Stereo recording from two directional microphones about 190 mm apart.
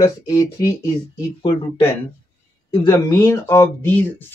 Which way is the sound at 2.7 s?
20° left (ahead or behind).